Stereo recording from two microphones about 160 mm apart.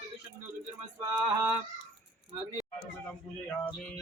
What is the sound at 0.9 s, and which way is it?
Male singing, 25° right (ahead or behind).